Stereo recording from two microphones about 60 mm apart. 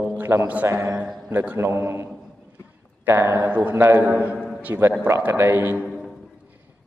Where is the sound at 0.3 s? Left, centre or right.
Right.